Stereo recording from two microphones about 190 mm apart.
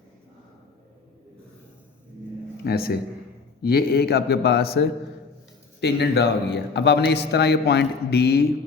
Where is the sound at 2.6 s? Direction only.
55° left (ahead or behind).